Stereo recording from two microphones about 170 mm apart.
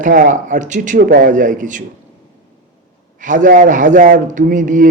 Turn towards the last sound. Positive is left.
turn(degrees=-50)  # may be behind; listen again after turning